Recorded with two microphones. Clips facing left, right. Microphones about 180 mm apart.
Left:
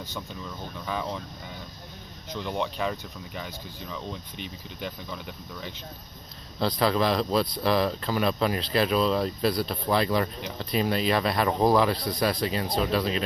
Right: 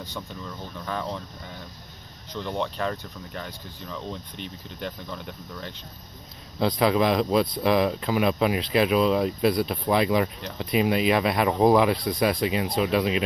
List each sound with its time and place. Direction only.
0.7 s speech: 5° left (ahead or behind)
2.3 s speech: 5° left (ahead or behind)
6.6 s speech: 10° right (ahead or behind)